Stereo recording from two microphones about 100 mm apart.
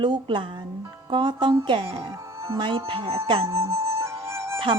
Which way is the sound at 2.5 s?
50° right (ahead or behind).